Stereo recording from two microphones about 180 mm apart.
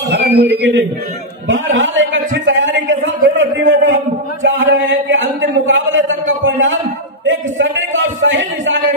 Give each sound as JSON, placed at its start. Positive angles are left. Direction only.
{"t": 0.1, "sound": "a man's voice", "side_deg": -70}
{"t": 1.5, "sound": "a man's voice", "side_deg": -90}
{"t": 7.2, "sound": "a sound", "side_deg": -90}